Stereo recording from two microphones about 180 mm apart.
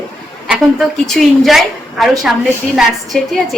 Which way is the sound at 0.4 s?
Centre (ahead or behind).